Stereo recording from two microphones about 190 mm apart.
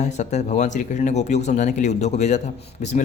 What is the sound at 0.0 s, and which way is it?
A man's voice, 40° left (ahead or behind).